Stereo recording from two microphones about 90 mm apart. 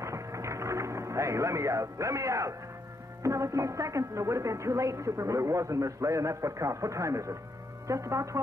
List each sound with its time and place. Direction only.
0.0 s music: 35° right (ahead or behind)
3.2 s speech: 35° right (ahead or behind)